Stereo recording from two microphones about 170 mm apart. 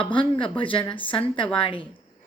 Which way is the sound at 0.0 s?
30° left (ahead or behind).